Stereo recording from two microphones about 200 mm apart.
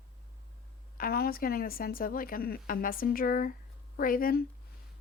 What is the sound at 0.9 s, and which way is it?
A woman's voice, 50° left (ahead or behind).